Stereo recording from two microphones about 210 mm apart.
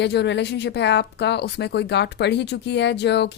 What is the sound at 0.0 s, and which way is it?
Speech, 55° left (ahead or behind).